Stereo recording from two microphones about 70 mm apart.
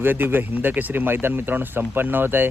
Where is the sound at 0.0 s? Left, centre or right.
Right.